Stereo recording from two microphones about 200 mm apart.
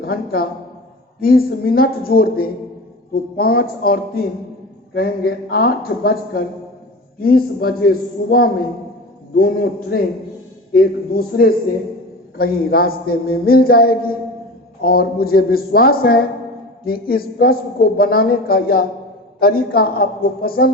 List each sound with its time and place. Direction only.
0.0 s a man's voice: 50° left (ahead or behind)